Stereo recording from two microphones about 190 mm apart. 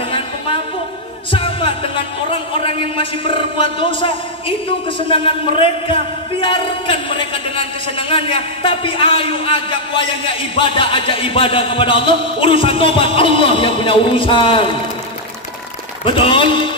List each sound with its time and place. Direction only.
1.3 s music: 30° left (ahead or behind)
2.5 s a man's voice: 30° left (ahead or behind)
16.0 s a man's voice: 25° left (ahead or behind)